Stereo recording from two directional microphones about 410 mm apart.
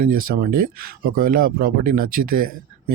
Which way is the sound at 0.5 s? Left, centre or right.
Right.